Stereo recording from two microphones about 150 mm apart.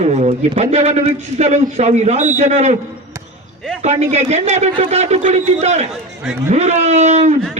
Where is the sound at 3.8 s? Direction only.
50° right (ahead or behind).